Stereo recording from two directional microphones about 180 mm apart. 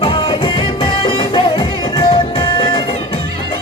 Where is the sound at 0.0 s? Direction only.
30° left (ahead or behind).